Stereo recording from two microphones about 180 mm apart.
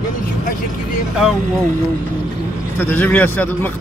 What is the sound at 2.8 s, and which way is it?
Speech, 10° left (ahead or behind).